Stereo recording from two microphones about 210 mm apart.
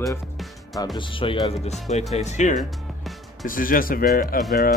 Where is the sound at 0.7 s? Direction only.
20° left (ahead or behind); by 4.1 s 40° left (ahead or behind).